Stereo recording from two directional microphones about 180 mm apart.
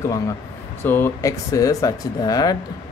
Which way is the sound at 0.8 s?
10° left (ahead or behind).